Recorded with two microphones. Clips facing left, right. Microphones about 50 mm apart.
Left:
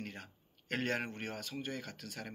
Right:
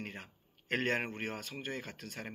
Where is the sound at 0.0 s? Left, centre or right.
Right.